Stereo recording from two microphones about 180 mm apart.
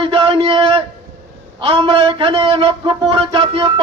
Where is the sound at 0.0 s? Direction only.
30° right (ahead or behind).